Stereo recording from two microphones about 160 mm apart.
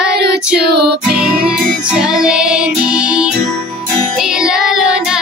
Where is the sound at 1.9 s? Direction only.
5° right (ahead or behind).